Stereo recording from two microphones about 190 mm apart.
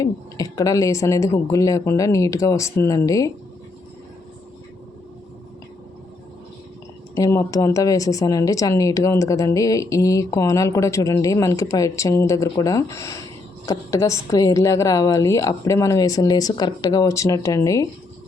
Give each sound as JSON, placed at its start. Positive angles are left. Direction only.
{"t": 0.0, "sound": "speech", "side_deg": 20}
{"t": 7.2, "sound": "speech", "side_deg": 15}